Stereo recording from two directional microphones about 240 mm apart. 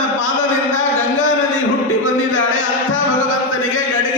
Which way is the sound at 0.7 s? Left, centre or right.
Left.